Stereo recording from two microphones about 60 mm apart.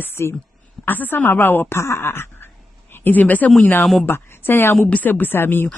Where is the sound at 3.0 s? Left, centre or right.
Left.